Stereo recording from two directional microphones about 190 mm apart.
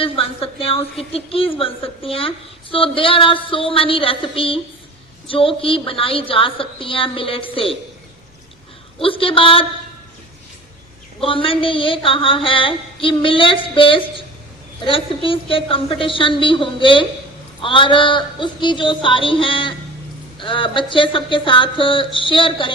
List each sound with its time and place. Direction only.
0.0 s a woman's voice: 30° left (ahead or behind)
9.0 s a woman's voice: 30° left (ahead or behind)
11.2 s a woman's voice: 30° left (ahead or behind)